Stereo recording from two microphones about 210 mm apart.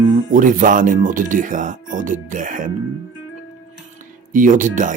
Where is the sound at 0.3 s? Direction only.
40° right (ahead or behind).